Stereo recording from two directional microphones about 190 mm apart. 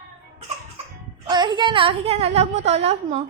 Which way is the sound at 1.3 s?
25° right (ahead or behind).